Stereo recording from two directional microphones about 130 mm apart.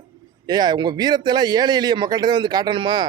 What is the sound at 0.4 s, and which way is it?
Speech, 35° right (ahead or behind).